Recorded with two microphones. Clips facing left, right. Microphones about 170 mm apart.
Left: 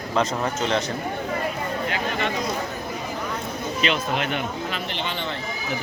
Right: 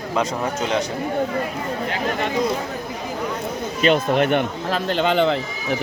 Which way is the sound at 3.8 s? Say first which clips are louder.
Right 8 dB; 50° right (ahead or behind).